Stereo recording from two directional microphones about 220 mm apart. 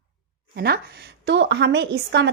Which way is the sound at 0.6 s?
45° right (ahead or behind).